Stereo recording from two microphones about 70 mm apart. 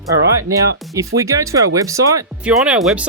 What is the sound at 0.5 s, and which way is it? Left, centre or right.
Speech, right.